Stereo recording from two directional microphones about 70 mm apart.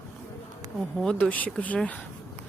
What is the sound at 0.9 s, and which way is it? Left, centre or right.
Speech, centre.